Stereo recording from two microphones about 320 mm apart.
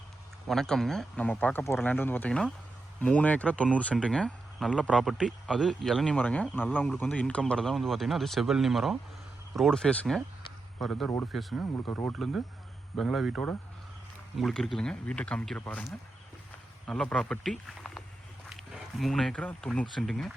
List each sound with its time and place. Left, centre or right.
0.4 s speech: centre